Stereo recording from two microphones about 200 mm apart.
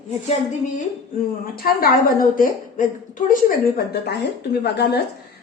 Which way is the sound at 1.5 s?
45° left (ahead or behind).